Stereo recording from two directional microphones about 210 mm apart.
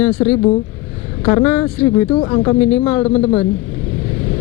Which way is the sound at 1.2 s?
15° left (ahead or behind).